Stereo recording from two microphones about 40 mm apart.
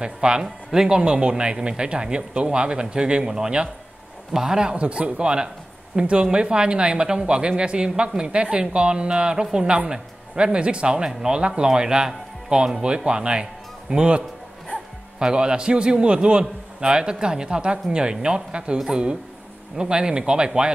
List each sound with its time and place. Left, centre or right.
0.0 s a man's voice: right
4.7 s a man's voice: right